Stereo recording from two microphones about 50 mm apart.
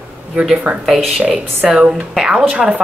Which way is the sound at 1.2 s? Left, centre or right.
Right.